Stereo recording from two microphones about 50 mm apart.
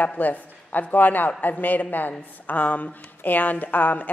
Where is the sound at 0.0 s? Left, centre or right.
Left.